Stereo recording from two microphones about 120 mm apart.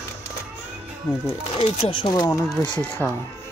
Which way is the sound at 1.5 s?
55° left (ahead or behind).